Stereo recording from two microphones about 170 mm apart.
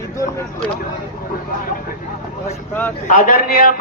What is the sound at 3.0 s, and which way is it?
Speech, 50° left (ahead or behind).